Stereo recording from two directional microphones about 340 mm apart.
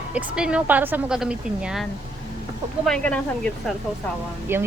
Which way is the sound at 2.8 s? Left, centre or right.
Centre.